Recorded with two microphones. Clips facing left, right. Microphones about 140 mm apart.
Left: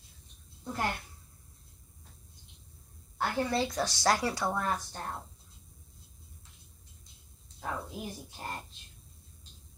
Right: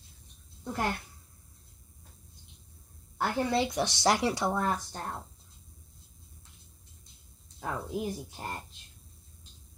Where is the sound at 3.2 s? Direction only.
20° right (ahead or behind).